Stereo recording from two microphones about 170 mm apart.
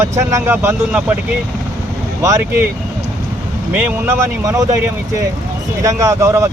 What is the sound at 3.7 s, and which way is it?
Speech, 20° right (ahead or behind).